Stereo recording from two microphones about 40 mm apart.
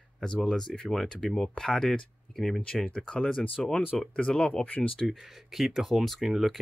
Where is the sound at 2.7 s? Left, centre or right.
Left.